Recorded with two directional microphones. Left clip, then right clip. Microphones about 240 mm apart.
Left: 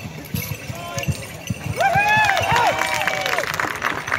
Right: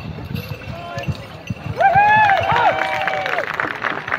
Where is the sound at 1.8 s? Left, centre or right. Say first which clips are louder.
Right 4 dB; left.